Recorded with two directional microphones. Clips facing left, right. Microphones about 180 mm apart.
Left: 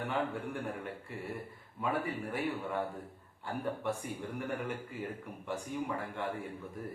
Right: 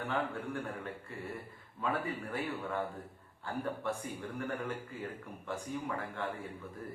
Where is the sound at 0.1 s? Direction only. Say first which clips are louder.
Right 1 dB; 15° left (ahead or behind).